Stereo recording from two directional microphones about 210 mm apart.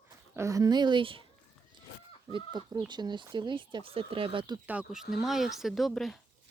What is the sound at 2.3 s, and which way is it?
Speech, 20° right (ahead or behind).